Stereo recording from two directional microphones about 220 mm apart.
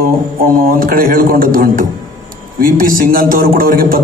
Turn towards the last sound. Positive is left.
turn(degrees=-40)  # may be behind; listen again after turning